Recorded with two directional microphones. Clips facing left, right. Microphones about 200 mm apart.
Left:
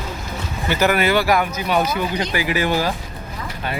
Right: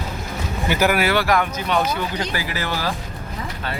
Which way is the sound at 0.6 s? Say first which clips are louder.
Left 1 dB; 10° right (ahead or behind).